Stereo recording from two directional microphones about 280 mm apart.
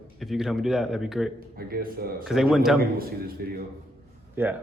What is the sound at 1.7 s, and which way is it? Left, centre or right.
Speech, right.